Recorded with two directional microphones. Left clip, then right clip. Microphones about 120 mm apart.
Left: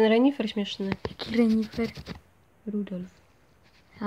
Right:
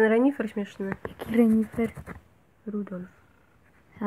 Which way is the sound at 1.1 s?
15° right (ahead or behind).